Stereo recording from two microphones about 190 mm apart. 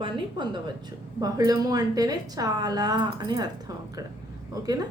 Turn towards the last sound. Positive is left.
turn(degrees=-20)  # may be behind; listen again after turning